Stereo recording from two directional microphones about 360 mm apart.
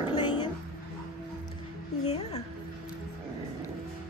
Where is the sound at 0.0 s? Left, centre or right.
Centre.